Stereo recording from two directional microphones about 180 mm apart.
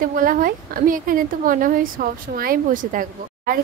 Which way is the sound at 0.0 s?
50° right (ahead or behind).